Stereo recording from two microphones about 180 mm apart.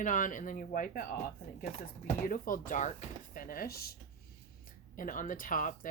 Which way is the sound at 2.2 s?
50° left (ahead or behind).